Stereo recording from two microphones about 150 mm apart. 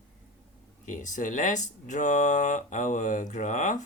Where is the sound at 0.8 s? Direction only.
60° left (ahead or behind).